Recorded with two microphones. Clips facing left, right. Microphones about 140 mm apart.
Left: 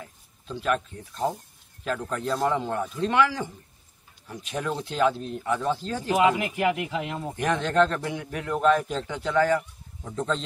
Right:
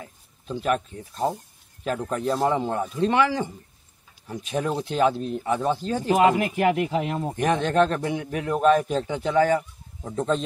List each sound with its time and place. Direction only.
0.0 s speech: 20° right (ahead or behind)
6.1 s speech: 40° right (ahead or behind)
7.2 s speech: 20° right (ahead or behind)